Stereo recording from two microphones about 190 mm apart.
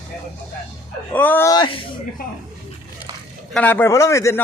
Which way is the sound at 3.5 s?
10° left (ahead or behind).